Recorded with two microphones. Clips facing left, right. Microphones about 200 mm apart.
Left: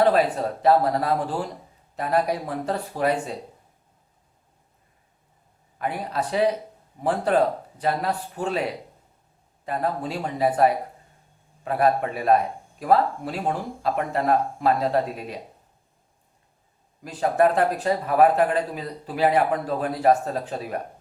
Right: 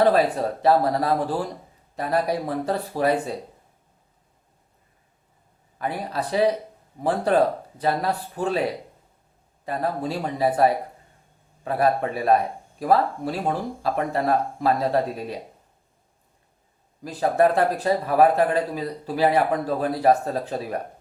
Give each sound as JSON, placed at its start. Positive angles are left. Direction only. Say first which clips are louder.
{"t": 0.0, "sound": "speech", "louder": "right 1 dB", "side_deg": -35}
{"t": 5.8, "sound": "speech", "louder": "even", "side_deg": -35}
{"t": 9.6, "sound": "speech", "louder": "right 1 dB", "side_deg": -35}
{"t": 17.0, "sound": "speech", "louder": "right 1 dB", "side_deg": -35}